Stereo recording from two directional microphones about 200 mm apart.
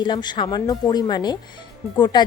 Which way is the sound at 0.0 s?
20° left (ahead or behind).